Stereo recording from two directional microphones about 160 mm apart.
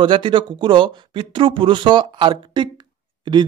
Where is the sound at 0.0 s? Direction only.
30° right (ahead or behind).